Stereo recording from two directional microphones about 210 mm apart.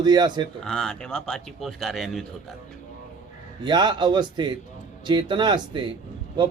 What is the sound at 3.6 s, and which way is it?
A man's voice, 20° right (ahead or behind).